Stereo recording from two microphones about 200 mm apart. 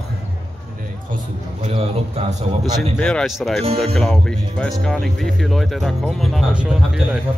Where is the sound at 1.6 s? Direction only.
30° right (ahead or behind).